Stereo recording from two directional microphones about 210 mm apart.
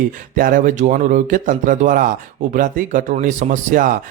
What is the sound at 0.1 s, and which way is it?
Speech, 40° right (ahead or behind).